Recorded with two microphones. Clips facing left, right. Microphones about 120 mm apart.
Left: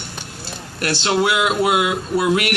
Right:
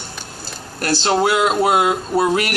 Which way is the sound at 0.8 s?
40° right (ahead or behind).